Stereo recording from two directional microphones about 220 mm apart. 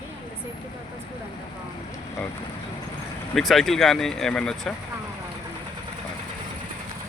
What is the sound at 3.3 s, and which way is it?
Speech, centre (ahead or behind).